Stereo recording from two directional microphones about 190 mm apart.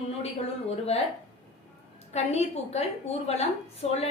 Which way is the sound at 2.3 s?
35° left (ahead or behind).